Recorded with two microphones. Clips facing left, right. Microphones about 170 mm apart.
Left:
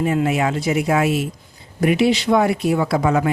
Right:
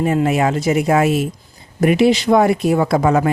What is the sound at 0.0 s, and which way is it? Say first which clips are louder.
A man's voice: right 3 dB; 40° right (ahead or behind).